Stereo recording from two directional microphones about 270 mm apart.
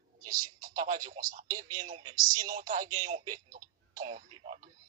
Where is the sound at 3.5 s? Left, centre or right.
Right.